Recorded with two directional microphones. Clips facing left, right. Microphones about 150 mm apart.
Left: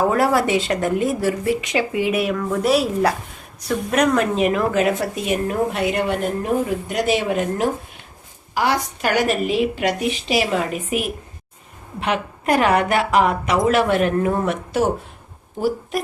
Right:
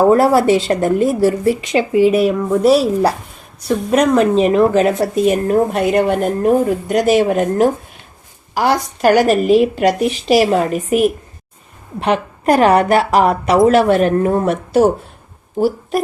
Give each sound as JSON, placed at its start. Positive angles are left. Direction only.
{"t": 0.1, "sound": "speech", "side_deg": -30}